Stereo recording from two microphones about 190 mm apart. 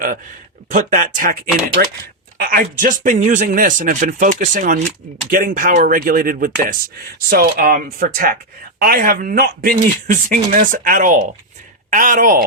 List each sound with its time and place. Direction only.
0.7 s speech: 45° right (ahead or behind)